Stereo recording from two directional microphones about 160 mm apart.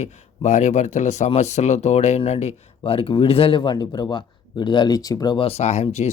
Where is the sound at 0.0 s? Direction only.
45° left (ahead or behind).